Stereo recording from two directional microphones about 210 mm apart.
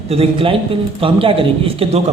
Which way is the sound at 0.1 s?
25° right (ahead or behind).